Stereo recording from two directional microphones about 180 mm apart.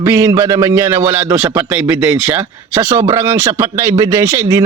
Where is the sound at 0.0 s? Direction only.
15° right (ahead or behind).